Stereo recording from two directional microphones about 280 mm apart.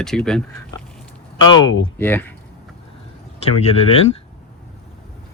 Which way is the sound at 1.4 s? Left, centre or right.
Centre.